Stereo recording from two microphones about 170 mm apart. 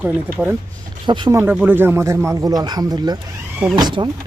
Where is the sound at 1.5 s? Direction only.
10° right (ahead or behind).